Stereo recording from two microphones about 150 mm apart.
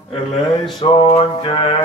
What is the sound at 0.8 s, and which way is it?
Speech, 35° left (ahead or behind).